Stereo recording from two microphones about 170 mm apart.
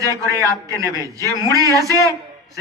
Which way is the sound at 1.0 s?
20° right (ahead or behind).